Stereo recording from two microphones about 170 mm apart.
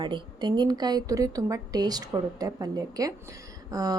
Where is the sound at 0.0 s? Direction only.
25° right (ahead or behind).